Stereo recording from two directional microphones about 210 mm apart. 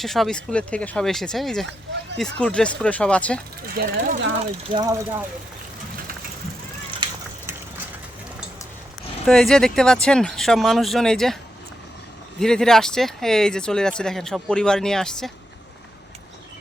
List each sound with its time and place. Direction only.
0.0 s speech: centre (ahead or behind)
3.8 s speech: 40° right (ahead or behind)
4.7 s speech: 20° right (ahead or behind)
9.2 s speech: centre (ahead or behind)
12.4 s speech: 5° left (ahead or behind)